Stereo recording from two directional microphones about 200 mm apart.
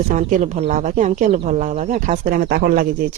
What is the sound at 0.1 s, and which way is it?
Speech, 40° right (ahead or behind).